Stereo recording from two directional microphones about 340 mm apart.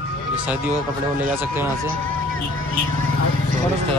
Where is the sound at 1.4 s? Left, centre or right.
Centre.